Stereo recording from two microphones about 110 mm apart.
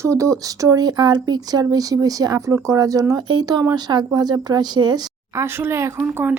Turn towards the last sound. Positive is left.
turn(degrees=-15)  # may be behind; listen again after turning